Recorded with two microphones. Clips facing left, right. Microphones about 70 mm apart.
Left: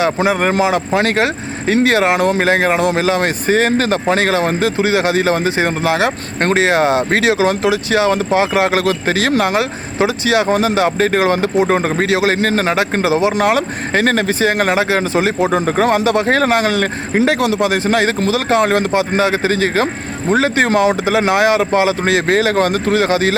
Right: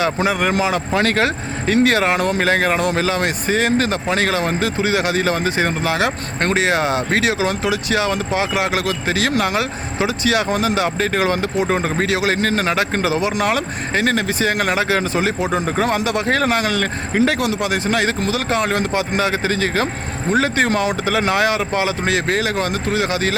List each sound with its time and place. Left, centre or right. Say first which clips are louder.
0.0 s speech: left 3 dB; left
13.4 s speech: left 4 dB; left
15.6 s speech: left 5 dB; left